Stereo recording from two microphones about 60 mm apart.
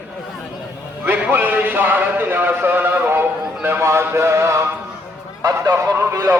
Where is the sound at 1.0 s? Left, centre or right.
Right.